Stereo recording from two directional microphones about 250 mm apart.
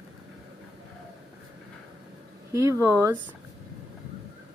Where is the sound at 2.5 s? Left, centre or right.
Centre.